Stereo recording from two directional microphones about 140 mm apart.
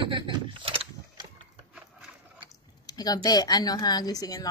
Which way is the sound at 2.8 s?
25° left (ahead or behind).